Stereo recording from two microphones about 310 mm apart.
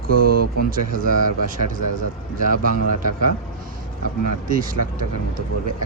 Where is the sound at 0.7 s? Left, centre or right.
Right.